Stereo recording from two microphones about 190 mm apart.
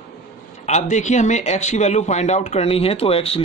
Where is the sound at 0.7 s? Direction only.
40° left (ahead or behind).